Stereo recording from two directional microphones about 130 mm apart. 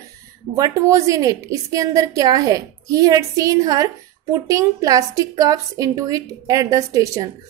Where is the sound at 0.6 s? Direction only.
25° right (ahead or behind).